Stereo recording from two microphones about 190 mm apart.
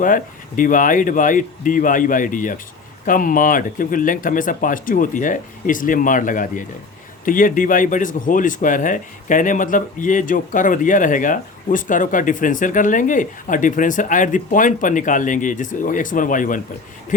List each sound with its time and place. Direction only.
0.0 s speech: 45° left (ahead or behind)